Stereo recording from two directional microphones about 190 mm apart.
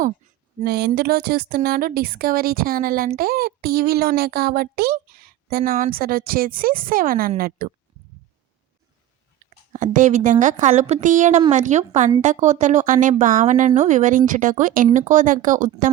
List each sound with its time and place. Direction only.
0.6 s speech: 55° right (ahead or behind)
9.4 s a sound: 40° right (ahead or behind)
9.7 s speech: 40° right (ahead or behind)